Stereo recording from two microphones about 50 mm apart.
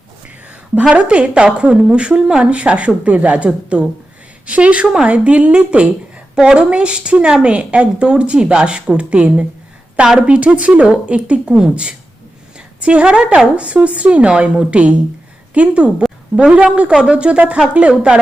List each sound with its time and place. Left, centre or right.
0.9 s a woman's voice: right